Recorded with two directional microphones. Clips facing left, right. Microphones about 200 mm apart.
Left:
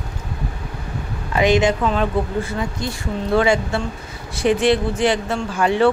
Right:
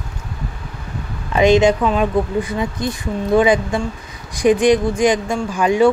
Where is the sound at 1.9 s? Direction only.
15° right (ahead or behind).